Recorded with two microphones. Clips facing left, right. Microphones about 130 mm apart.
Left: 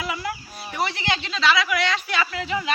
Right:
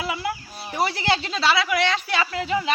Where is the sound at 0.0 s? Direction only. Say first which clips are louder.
Right 2 dB; 25° right (ahead or behind).